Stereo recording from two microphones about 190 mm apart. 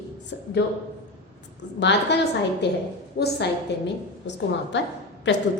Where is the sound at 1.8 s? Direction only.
65° left (ahead or behind).